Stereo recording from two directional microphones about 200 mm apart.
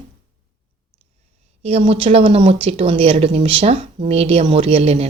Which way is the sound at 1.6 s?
30° right (ahead or behind).